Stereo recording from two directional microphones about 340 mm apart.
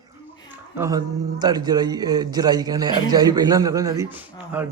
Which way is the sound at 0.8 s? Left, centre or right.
Centre.